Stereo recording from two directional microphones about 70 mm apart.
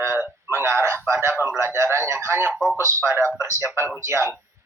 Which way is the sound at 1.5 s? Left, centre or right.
Right.